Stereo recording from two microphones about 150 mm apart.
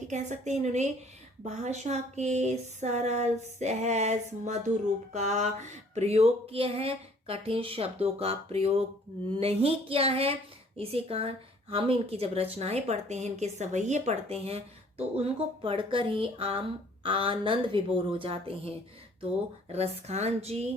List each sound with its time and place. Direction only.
0.1 s speech: 50° right (ahead or behind)